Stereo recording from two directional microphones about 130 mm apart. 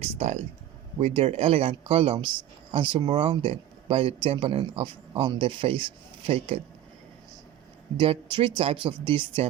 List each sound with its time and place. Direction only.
0.2 s speech: 60° right (ahead or behind)
7.9 s speech: 40° right (ahead or behind)